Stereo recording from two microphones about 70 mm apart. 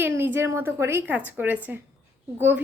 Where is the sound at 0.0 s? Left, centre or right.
Right.